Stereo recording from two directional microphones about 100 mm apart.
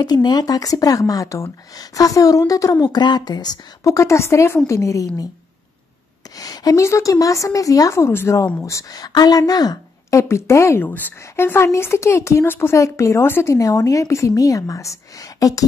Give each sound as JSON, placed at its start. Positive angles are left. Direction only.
{"t": 0.0, "sound": "speech", "side_deg": 45}
{"t": 6.3, "sound": "speech", "side_deg": 40}
{"t": 10.2, "sound": "speech", "side_deg": 25}